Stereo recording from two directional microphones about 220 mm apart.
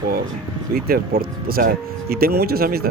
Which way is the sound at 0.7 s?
45° right (ahead or behind).